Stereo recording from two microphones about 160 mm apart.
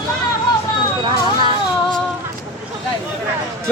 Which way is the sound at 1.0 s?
30° right (ahead or behind).